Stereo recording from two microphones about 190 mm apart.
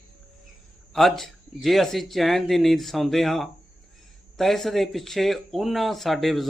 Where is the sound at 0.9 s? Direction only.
Centre (ahead or behind).